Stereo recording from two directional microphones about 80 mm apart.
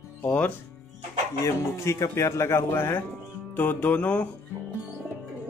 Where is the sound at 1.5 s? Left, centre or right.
Left.